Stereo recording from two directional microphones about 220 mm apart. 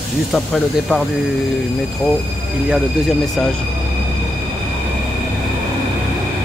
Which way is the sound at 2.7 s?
Centre (ahead or behind).